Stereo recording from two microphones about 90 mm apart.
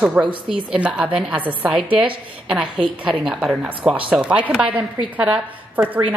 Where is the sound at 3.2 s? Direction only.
5° right (ahead or behind).